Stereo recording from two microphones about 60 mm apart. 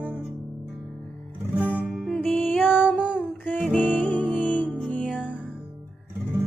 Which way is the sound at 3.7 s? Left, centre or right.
Left.